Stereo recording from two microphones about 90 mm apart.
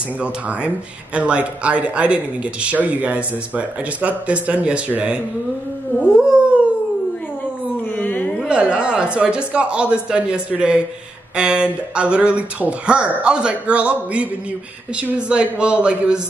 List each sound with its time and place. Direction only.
0.2 s speech: 15° right (ahead or behind)
6.1 s howl: 10° right (ahead or behind)
7.9 s a sound: 20° left (ahead or behind)
8.5 s speech: 10° right (ahead or behind)